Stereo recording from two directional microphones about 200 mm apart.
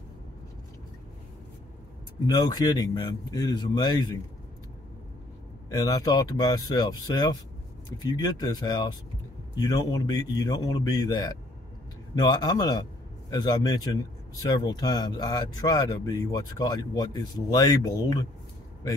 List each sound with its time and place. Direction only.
2.2 s speech: 20° left (ahead or behind)
5.7 s speech: 20° left (ahead or behind)